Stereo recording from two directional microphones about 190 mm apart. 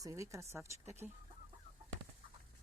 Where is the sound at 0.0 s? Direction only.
15° right (ahead or behind).